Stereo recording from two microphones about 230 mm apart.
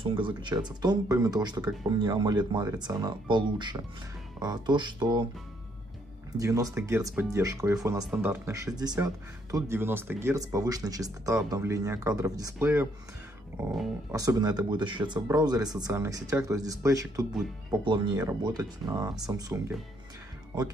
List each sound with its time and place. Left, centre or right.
0.0 s speech: right
6.3 s speech: centre